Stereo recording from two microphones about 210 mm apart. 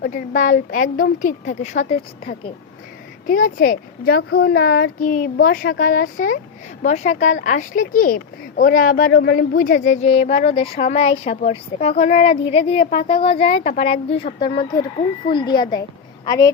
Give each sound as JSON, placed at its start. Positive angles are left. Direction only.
{"t": 0.0, "sound": "speech", "side_deg": 40}
{"t": 3.2, "sound": "a woman's voice", "side_deg": 45}